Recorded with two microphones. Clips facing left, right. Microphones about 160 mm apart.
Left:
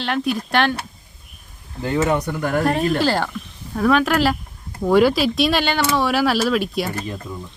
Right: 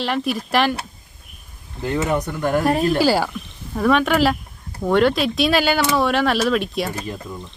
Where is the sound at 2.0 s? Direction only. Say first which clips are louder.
Left 2 dB; centre (ahead or behind).